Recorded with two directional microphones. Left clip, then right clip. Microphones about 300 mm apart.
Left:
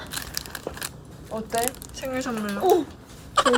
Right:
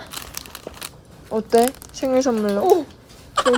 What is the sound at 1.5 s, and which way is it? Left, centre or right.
Speech, centre.